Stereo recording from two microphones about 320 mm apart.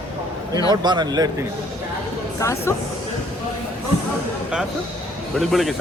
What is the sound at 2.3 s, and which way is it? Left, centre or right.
Speech, centre.